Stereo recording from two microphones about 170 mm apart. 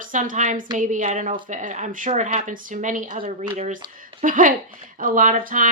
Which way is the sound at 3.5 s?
40° right (ahead or behind).